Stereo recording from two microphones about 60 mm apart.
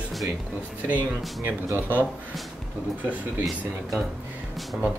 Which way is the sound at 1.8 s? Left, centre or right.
Right.